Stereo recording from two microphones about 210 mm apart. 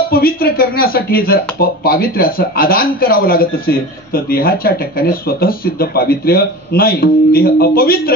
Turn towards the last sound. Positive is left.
turn(degrees=45)  # may be behind; listen again after turning